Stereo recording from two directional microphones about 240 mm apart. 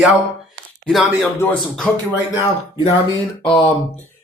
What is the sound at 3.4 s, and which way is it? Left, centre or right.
Speech, centre.